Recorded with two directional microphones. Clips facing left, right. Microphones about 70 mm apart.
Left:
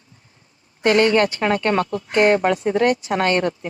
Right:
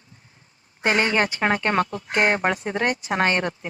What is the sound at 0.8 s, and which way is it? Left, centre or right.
Speech, right.